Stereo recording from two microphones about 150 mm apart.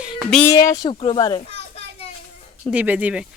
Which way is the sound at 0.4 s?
20° left (ahead or behind).